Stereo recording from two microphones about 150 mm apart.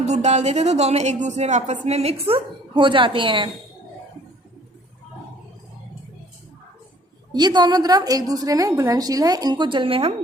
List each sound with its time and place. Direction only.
0.0 s speech: 50° right (ahead or behind)
7.3 s a woman's voice: 30° right (ahead or behind)